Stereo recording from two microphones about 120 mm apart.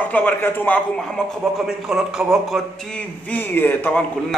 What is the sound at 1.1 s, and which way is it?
Speech, 5° right (ahead or behind).